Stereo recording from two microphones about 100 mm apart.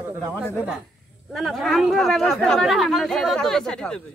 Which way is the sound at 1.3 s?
Centre (ahead or behind).